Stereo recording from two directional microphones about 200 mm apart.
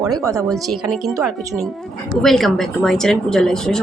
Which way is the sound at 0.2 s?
15° right (ahead or behind).